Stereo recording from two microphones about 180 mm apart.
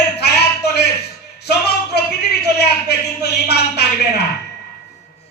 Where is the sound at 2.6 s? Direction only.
65° left (ahead or behind).